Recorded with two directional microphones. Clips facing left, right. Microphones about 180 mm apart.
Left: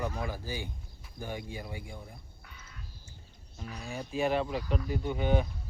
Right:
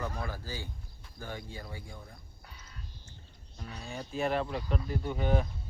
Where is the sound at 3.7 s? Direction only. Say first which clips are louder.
Left 2 dB; 10° left (ahead or behind).